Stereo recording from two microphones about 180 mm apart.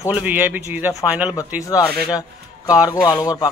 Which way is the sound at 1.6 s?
20° left (ahead or behind).